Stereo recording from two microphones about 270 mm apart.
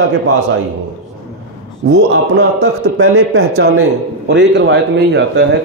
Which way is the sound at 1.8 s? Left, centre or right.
Right.